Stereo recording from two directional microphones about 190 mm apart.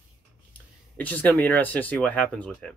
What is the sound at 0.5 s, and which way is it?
Speech, 10° left (ahead or behind).